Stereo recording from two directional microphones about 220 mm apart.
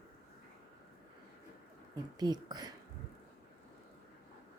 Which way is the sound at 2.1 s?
20° right (ahead or behind).